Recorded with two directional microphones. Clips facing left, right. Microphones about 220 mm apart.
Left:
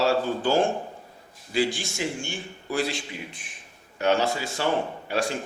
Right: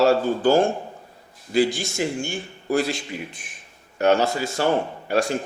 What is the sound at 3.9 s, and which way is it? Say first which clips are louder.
Speech: right 4 dB; 45° right (ahead or behind).